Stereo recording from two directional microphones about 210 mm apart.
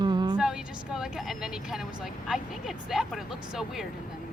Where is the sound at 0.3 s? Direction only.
5° right (ahead or behind).